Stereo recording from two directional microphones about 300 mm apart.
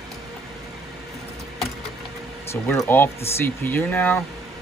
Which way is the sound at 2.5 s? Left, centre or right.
Centre.